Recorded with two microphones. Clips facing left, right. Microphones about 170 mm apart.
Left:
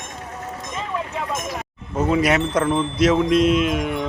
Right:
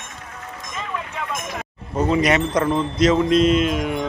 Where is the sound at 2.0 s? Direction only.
5° left (ahead or behind).